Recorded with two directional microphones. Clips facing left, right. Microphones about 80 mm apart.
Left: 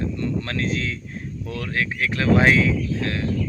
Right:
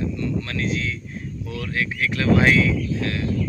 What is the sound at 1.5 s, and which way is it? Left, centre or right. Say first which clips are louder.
Speech: left 1 dB; left.